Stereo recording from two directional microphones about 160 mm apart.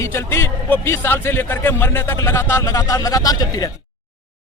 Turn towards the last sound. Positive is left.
turn(degrees=25)  # may be behind; listen again after turning